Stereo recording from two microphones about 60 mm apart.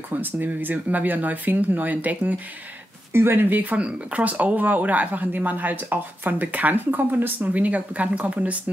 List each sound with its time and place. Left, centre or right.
0.1 s speech: right
3.1 s speech: right